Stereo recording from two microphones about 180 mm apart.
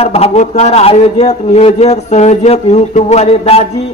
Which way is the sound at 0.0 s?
35° left (ahead or behind).